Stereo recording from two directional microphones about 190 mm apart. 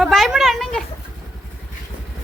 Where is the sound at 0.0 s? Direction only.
Centre (ahead or behind).